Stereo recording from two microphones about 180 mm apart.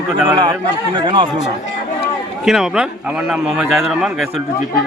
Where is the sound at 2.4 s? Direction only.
5° right (ahead or behind).